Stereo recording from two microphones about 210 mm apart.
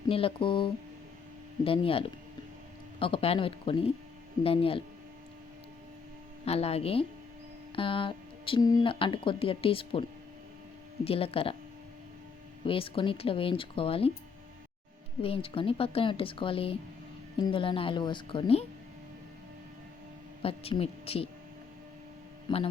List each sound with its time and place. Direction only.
0.1 s speech: 25° left (ahead or behind)
6.4 s speech: 30° left (ahead or behind)
11.0 s speech: 25° left (ahead or behind)
12.6 s speech: 25° left (ahead or behind)
15.2 s speech: 25° left (ahead or behind)
20.4 s speech: 25° left (ahead or behind)
22.4 s speech: 25° left (ahead or behind)